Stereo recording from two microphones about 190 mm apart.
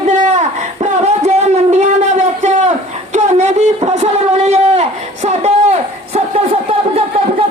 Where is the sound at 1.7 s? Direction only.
40° right (ahead or behind).